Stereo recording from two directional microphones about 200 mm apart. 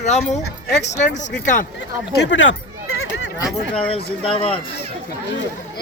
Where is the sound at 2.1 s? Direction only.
70° left (ahead or behind).